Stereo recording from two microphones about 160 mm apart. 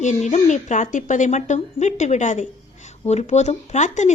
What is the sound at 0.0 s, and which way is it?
Speech, 45° left (ahead or behind).